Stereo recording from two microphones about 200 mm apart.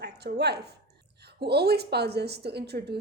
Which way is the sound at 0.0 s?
55° right (ahead or behind).